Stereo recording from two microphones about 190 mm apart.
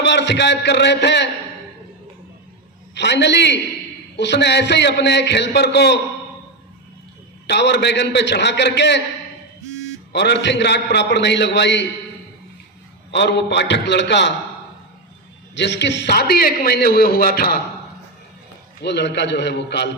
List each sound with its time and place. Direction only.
0.0 s a man's voice: 65° left (ahead or behind)
2.9 s a man's voice: 65° left (ahead or behind)
7.4 s a man's voice: 65° left (ahead or behind)
10.1 s a man's voice: 65° left (ahead or behind)
13.1 s a man's voice: 65° left (ahead or behind)
15.5 s a man's voice: 65° left (ahead or behind)
18.8 s a man's voice: 65° left (ahead or behind)